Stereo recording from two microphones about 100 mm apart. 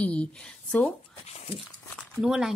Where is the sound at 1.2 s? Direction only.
85° left.